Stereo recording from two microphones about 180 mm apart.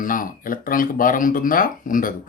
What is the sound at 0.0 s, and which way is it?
Speech, 50° left (ahead or behind).